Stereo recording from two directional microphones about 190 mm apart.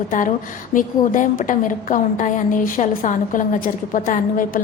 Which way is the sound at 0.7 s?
45° left (ahead or behind).